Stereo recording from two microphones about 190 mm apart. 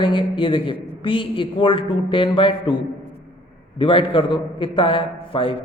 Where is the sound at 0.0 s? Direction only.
25° left (ahead or behind).